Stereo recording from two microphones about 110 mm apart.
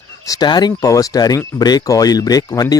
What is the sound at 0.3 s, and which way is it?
Speech, 40° left (ahead or behind).